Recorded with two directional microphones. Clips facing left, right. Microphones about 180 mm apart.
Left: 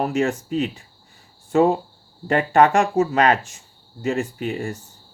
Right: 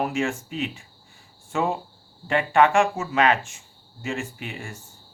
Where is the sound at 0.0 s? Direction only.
40° left (ahead or behind).